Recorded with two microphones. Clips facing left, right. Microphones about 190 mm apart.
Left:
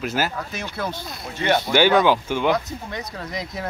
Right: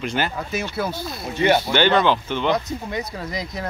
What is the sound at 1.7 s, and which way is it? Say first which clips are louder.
Speech: left 1 dB; 10° left (ahead or behind).